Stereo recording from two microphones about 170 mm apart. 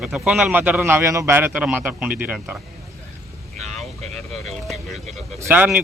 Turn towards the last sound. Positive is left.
turn(degrees=-10)  # may be behind; listen again after turning